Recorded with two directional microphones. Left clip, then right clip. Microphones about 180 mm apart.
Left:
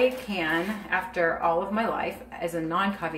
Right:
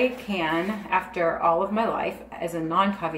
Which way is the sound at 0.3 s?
15° right (ahead or behind).